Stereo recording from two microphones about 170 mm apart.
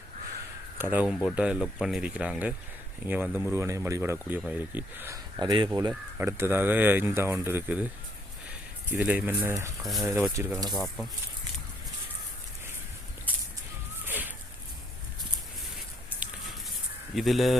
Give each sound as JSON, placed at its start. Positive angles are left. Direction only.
{"t": 0.8, "sound": "speech", "side_deg": -10}
{"t": 5.4, "sound": "speech", "side_deg": -25}
{"t": 5.9, "sound": "speech", "side_deg": -15}
{"t": 8.9, "sound": "speech", "side_deg": -10}
{"t": 9.8, "sound": "speech", "side_deg": 0}
{"t": 10.1, "sound": "speech", "side_deg": -15}
{"t": 10.7, "sound": "speech", "side_deg": 0}
{"t": 14.1, "sound": "a sound", "side_deg": -10}
{"t": 17.2, "sound": "speech", "side_deg": 0}